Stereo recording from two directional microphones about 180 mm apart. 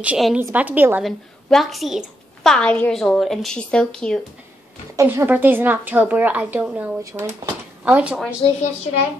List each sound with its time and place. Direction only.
0.0 s a woman's voice: 5° right (ahead or behind)
4.9 s a woman's voice: 15° right (ahead or behind)
8.5 s a child's voice: 40° left (ahead or behind)